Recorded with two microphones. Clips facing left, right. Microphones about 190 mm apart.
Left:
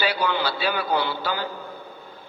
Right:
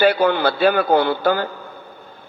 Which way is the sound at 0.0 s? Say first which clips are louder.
Right 9 dB; 55° right (ahead or behind).